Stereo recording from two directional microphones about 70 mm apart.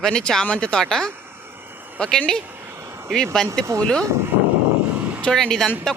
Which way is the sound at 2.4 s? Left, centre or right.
Right.